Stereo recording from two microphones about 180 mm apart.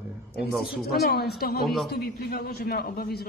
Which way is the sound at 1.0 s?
60° left (ahead or behind).